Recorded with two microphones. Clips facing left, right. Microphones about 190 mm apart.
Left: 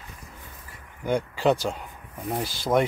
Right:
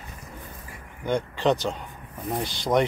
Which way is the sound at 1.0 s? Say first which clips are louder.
Left 1 dB; 5° left (ahead or behind).